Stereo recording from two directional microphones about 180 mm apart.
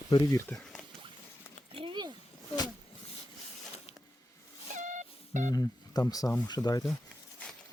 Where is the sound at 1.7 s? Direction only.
30° right (ahead or behind).